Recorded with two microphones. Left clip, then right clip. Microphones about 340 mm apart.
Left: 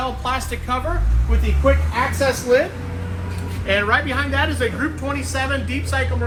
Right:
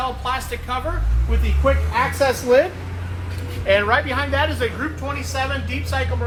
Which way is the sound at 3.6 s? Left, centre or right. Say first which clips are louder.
Right 1 dB; right.